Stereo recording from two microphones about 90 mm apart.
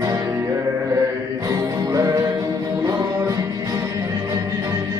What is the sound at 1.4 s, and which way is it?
Music, 40° right (ahead or behind).